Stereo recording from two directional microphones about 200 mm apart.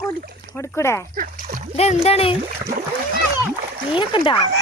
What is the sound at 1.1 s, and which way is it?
Speech, 45° right (ahead or behind).